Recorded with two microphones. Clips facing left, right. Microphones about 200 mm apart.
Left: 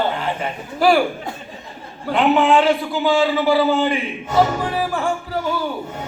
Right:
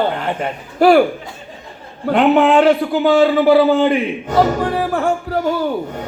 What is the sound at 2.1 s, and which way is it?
A man's voice, 60° right (ahead or behind).